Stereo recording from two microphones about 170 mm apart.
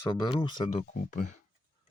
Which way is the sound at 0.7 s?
40° left (ahead or behind).